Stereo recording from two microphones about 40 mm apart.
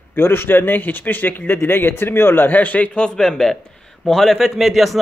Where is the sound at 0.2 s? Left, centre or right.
Left.